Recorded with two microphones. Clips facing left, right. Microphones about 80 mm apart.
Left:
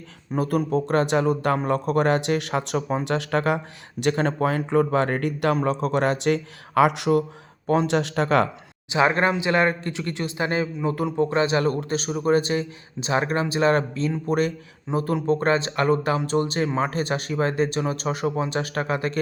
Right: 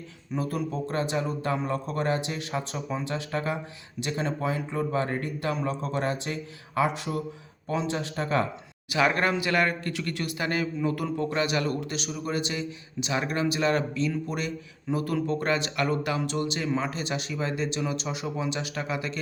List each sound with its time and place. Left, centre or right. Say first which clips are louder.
0.3 s speech: left 7 dB; left
4.0 s speech: left 7 dB; left
5.6 s speech: left 7 dB; left
7.7 s speech: left 8 dB; left
8.9 s a man's voice: left 4 dB; left
14.8 s speech: left 5 dB; left